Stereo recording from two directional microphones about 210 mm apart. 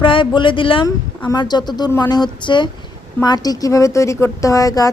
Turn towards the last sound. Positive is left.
turn(degrees=15)  # may be behind; listen again after turning